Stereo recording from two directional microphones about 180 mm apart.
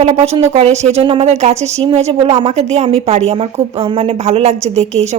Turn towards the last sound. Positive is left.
turn(degrees=-40)  # may be behind; listen again after turning